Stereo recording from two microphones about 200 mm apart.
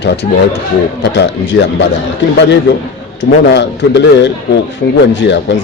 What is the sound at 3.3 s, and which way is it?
Speech, 60° left (ahead or behind).